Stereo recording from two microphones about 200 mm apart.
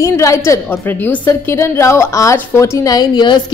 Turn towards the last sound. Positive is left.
turn(degrees=20)  # may be behind; listen again after turning